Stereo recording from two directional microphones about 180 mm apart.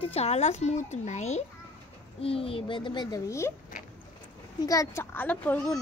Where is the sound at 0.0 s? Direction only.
35° left (ahead or behind); by 3.5 s 15° left (ahead or behind).